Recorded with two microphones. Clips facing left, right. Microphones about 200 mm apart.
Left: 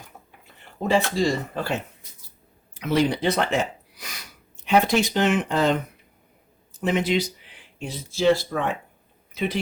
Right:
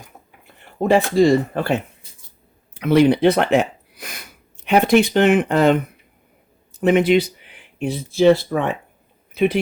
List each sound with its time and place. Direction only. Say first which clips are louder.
0.8 s speech: right 7 dB; 55° right (ahead or behind)
6.7 s speech: right 8 dB; 60° right (ahead or behind)